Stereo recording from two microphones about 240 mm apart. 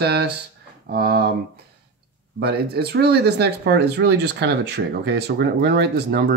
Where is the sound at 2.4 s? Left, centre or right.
Right.